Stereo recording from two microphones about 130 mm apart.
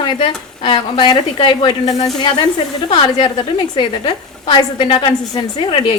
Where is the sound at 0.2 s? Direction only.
40° left (ahead or behind).